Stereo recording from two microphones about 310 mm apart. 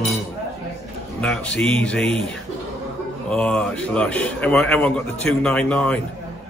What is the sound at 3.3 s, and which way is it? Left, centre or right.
A man's voice, centre.